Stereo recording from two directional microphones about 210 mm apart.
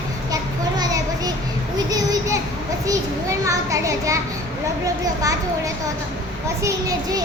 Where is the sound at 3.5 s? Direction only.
15° right (ahead or behind).